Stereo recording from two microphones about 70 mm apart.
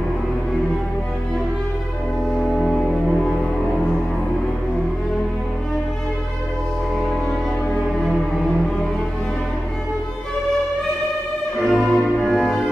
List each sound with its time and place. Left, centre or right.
11.6 s music: centre